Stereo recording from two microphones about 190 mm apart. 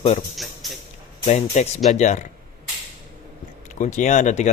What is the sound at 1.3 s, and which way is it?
A man's voice, 35° left (ahead or behind).